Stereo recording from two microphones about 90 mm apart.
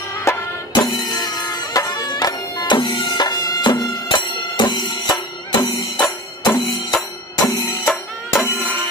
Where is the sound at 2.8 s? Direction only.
60° left (ahead or behind); by 3.9 s 40° left (ahead or behind).